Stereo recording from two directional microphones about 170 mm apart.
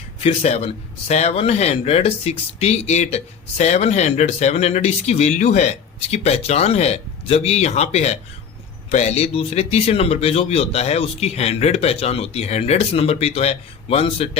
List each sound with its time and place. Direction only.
0.2 s speech: 35° left (ahead or behind)